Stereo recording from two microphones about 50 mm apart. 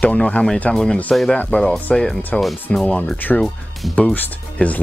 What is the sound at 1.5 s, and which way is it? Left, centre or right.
Speech, left.